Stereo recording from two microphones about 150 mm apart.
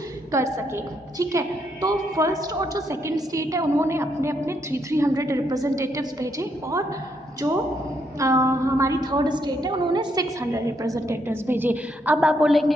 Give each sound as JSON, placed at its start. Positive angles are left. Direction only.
{"t": 0.3, "sound": "a woman's voice", "side_deg": -20}
{"t": 8.2, "sound": "a woman's voice", "side_deg": -20}